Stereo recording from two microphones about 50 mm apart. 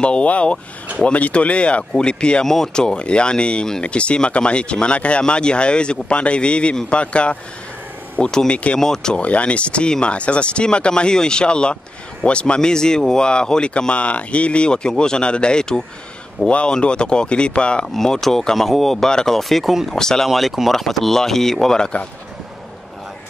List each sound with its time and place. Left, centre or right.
0.0 s speech: left
2.4 s speech: centre
9.1 s speech: left
17.9 s speech: centre
20.2 s speech: centre
21.7 s speech: centre